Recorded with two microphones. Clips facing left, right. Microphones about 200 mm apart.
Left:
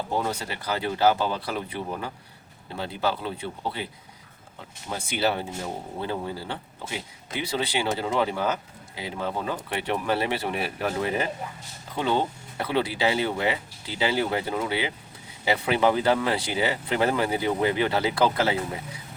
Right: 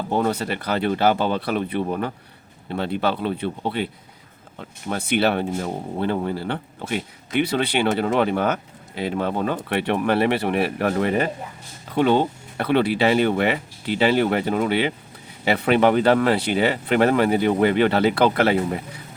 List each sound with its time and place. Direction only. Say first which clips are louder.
0.1 s speech: right 9 dB; 60° right (ahead or behind)
4.9 s speech: right 6 dB; 65° right (ahead or behind)